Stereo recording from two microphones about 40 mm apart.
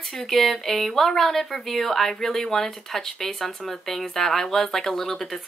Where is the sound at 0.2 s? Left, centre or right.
Centre.